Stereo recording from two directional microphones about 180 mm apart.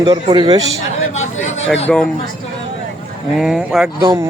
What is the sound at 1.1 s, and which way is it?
Chatter, 40° left (ahead or behind).